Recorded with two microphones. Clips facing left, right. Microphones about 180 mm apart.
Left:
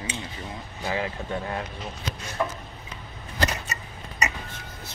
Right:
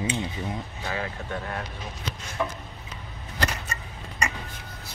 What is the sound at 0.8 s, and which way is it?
Speech, 15° left (ahead or behind).